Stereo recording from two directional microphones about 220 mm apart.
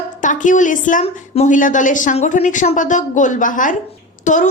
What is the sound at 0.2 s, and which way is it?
Speech, 35° left (ahead or behind).